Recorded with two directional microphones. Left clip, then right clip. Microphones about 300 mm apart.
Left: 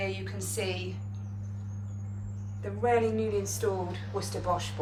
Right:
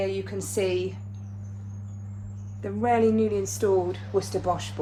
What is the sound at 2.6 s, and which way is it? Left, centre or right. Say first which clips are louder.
Speech: right 4 dB; right.